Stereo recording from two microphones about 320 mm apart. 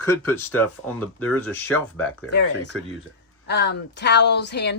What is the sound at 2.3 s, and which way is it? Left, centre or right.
A woman's voice, left.